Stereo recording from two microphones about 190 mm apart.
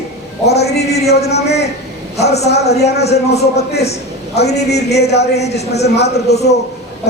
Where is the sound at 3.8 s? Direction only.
35° left (ahead or behind).